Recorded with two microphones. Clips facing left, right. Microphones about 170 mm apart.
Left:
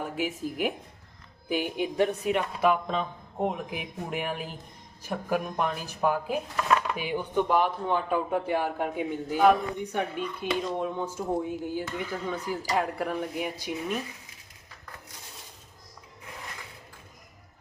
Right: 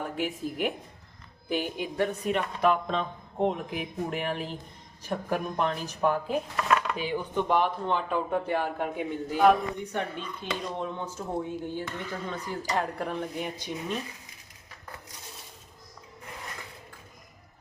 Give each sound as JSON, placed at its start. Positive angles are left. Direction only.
{"t": 0.0, "sound": "speech", "side_deg": 5}
{"t": 9.9, "sound": "speech", "side_deg": 10}